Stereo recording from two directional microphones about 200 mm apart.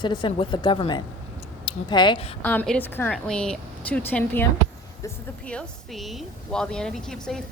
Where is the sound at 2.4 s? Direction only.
10° left (ahead or behind).